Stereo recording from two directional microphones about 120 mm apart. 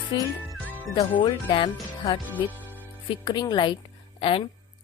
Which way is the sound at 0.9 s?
50° left (ahead or behind).